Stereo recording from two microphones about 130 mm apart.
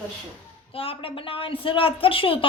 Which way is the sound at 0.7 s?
45° left (ahead or behind).